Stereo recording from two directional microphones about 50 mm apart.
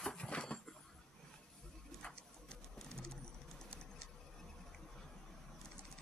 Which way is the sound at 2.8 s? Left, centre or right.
Centre.